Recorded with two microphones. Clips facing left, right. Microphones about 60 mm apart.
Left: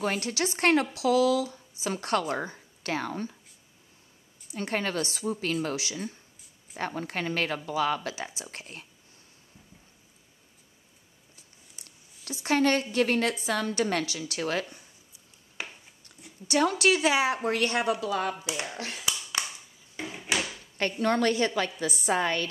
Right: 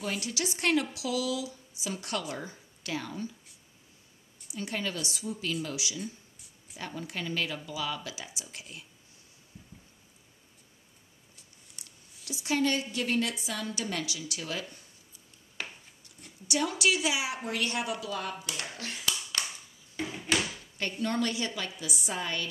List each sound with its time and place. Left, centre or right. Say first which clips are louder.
0.0 s speech: left 5 dB; left
4.5 s speech: left 4 dB; left
12.4 s speech: left 4 dB; left
15.5 s a sound: left 1 dB; centre
16.4 s speech: left 5 dB; left
18.4 s speech: left 4 dB; left
19.4 s a sound: left 3 dB; centre
20.0 s drawer open or close: even; centre
21.0 s speech: left 6 dB; left